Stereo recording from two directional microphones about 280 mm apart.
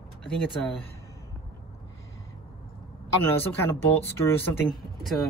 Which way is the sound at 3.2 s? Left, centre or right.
Centre.